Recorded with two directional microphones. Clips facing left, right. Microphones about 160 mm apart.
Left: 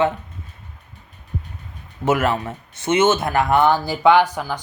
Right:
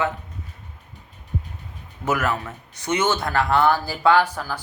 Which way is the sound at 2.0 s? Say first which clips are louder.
Left 4 dB; 25° left (ahead or behind).